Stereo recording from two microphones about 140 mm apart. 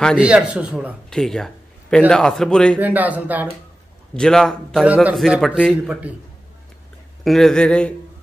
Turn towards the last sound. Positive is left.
turn(degrees=5)  # may be behind; listen again after turning